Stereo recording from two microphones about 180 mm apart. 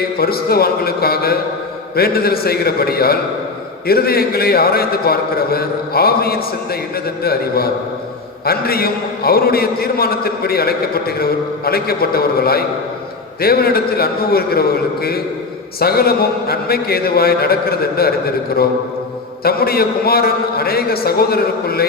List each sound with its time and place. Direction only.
0.2 s a man's voice: 60° left (ahead or behind)